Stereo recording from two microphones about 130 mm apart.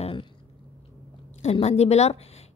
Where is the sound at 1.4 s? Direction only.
55° left (ahead or behind).